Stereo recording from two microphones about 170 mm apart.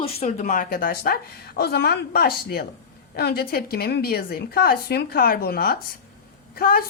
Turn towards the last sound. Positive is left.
turn(degrees=60)  # may be behind; listen again after turning